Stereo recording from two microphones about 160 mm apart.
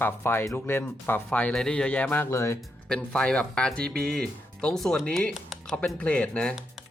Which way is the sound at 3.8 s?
75° right (ahead or behind).